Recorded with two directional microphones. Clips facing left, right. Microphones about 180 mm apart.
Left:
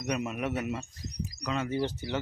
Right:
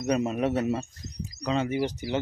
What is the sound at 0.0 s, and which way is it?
Speech, 30° right (ahead or behind).